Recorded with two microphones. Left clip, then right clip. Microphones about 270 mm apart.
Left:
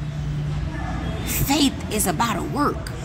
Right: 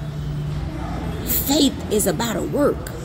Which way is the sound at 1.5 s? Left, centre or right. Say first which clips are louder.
Right 2 dB; left.